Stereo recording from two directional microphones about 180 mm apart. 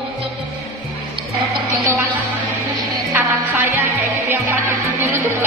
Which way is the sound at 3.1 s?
15° right (ahead or behind).